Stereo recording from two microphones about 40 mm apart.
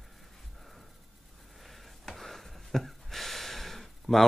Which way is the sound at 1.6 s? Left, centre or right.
Centre.